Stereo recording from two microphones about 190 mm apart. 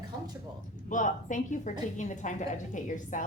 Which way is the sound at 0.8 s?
40° left (ahead or behind).